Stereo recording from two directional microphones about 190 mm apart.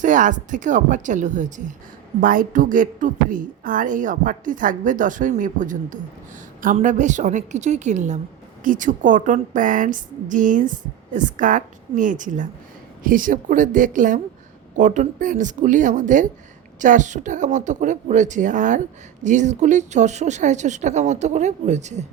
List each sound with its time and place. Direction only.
0.0 s a woman's voice: 40° right (ahead or behind)